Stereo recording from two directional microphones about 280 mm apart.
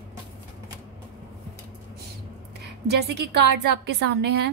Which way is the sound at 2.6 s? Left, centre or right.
Right.